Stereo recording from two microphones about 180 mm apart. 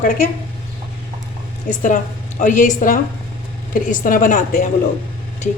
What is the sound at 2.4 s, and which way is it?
A woman's voice, 45° left (ahead or behind).